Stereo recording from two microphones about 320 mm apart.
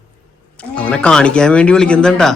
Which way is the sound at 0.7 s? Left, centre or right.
Centre.